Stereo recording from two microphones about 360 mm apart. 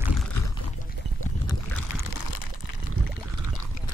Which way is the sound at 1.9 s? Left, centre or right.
Left.